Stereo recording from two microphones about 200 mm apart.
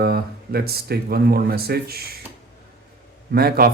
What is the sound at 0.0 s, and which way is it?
Speech, 50° right (ahead or behind).